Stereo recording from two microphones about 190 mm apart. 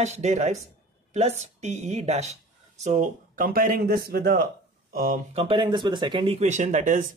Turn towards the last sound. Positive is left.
turn(degrees=-40)  # may be behind; listen again after turning